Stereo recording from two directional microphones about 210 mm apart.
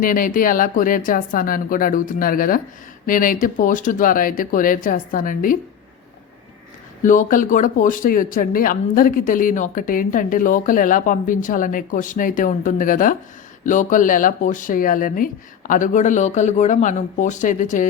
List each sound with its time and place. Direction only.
0.0 s speech: 40° left (ahead or behind)
7.0 s speech: 35° left (ahead or behind)